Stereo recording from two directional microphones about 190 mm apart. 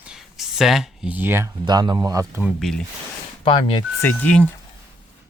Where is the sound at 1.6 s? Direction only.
25° right (ahead or behind); by 2.8 s centre (ahead or behind).